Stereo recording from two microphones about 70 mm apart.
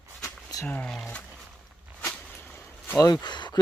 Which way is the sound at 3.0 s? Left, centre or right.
Left.